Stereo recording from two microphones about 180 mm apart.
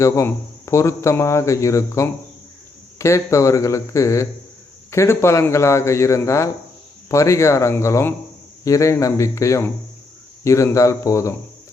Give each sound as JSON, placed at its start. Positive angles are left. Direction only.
{"t": 0.0, "sound": "speech", "side_deg": 15}